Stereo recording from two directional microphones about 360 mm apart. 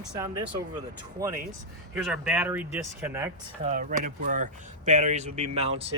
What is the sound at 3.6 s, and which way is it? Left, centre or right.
Speech, right.